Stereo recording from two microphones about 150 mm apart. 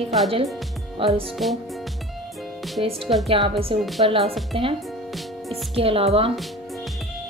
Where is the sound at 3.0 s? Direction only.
Centre (ahead or behind).